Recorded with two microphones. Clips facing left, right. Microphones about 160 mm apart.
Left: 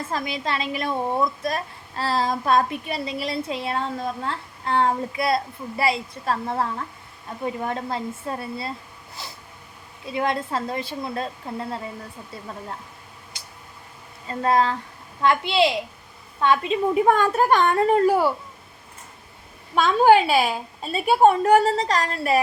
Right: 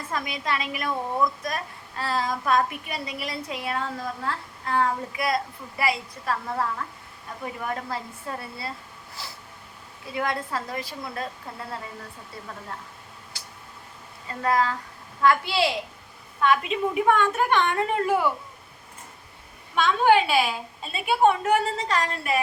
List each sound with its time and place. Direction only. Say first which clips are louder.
0.1 s a woman's voice: even; 30° left (ahead or behind)
13.3 s a sound: even; 20° left (ahead or behind)
14.3 s a woman's voice: left 3 dB; 25° left (ahead or behind)
19.7 s a woman's voice: left 4 dB; 40° left (ahead or behind)